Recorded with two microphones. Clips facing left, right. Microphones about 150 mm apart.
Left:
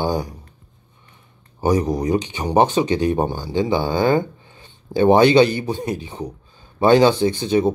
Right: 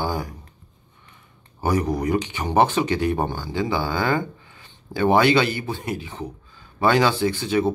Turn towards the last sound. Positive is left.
turn(degrees=20)  # may be behind; listen again after turning